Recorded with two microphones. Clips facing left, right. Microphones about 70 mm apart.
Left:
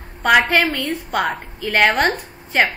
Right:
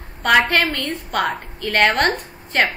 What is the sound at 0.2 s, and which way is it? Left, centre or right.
A woman's voice, centre.